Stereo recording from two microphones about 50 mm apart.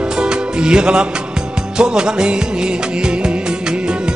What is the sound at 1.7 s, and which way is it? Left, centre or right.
Music of bollywood, centre.